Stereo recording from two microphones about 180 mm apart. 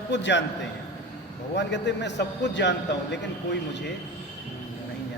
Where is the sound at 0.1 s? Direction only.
80° left.